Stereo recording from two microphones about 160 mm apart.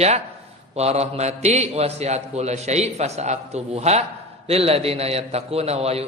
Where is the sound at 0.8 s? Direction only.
40° right (ahead or behind).